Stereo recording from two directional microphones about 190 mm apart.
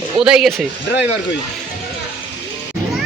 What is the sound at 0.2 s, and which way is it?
Speech, 5° right (ahead or behind).